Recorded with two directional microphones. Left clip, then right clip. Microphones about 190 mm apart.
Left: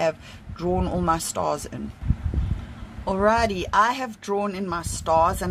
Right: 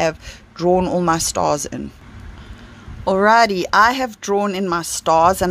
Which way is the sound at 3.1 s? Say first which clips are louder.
Right 8 dB; 40° right (ahead or behind).